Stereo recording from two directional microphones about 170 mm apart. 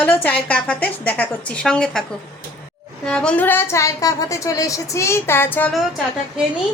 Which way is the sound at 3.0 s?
5° left (ahead or behind).